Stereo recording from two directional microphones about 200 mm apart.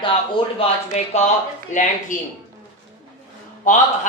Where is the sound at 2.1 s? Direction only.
40° left (ahead or behind).